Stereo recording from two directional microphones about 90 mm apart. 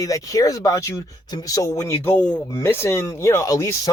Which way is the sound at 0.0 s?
40° left (ahead or behind).